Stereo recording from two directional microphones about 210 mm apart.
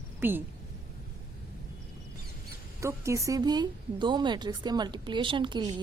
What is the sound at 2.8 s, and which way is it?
A woman's voice, 15° right (ahead or behind).